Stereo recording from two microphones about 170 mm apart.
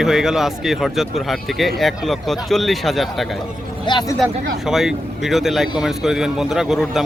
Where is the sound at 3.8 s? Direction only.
25° left (ahead or behind).